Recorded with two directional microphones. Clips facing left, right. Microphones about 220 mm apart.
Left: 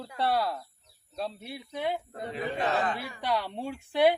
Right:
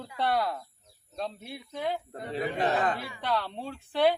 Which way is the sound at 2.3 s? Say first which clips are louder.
Right 2 dB; 35° right (ahead or behind).